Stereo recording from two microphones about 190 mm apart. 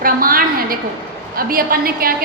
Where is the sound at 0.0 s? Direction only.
50° right (ahead or behind).